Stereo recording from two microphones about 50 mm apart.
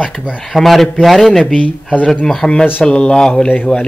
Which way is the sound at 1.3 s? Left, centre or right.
Centre.